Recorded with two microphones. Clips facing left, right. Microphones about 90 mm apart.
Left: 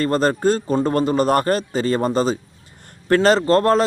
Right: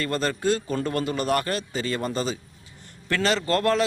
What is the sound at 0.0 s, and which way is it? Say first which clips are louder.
A man's voice: left 8 dB; 40° left (ahead or behind).